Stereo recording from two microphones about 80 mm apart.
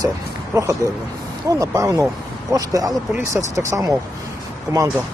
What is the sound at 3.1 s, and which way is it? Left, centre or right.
Speech, right.